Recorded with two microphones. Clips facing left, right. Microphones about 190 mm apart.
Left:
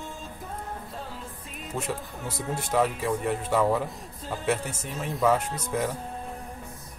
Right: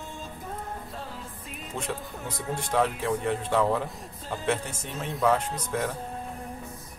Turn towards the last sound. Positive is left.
turn(degrees=5)  # may be behind; listen again after turning